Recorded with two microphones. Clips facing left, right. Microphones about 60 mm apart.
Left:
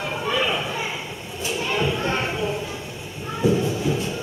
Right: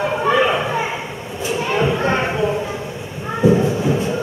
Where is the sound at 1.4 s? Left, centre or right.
Right.